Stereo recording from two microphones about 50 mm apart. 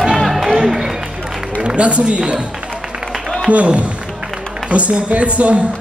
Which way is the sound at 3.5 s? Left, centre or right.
Right.